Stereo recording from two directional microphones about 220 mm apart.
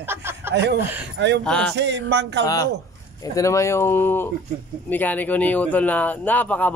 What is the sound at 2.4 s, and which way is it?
Speech, 15° left (ahead or behind).